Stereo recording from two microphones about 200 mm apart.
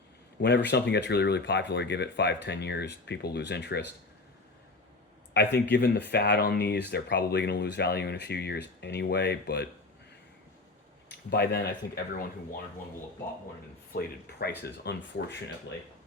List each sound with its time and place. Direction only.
0.4 s speech: 60° left (ahead or behind)
5.3 s speech: 55° left (ahead or behind)
11.1 s speech: 55° left (ahead or behind)
13.9 s speech: 50° left (ahead or behind)